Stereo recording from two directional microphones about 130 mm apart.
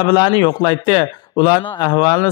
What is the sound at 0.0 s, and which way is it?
A man's voice, 35° left (ahead or behind).